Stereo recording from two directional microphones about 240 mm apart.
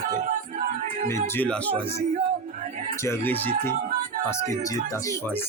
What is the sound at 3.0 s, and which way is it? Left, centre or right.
Speech, centre.